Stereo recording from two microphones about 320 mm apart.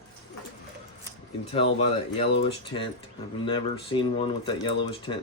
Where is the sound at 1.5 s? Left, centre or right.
Centre.